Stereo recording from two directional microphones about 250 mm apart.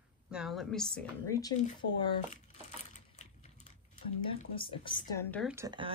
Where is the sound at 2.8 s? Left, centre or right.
Left.